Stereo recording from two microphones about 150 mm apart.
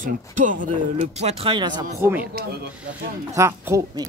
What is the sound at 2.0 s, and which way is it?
Speech, 15° right (ahead or behind).